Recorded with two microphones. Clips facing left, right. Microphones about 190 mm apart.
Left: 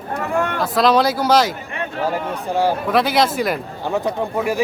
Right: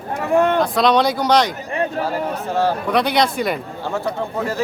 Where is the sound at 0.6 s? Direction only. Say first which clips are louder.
Even; 5° left (ahead or behind).